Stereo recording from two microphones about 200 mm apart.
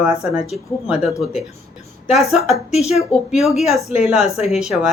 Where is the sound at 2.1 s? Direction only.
Centre (ahead or behind).